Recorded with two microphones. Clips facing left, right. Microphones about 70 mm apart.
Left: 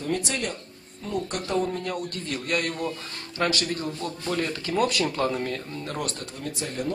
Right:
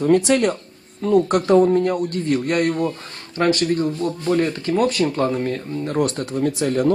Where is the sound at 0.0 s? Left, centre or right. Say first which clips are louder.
Right 13 dB; right.